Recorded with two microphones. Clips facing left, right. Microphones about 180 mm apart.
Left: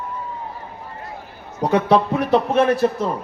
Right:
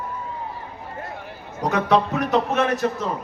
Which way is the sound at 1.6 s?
30° left (ahead or behind).